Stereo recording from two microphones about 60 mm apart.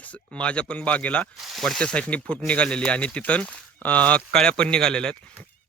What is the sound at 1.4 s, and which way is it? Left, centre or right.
Speech, centre.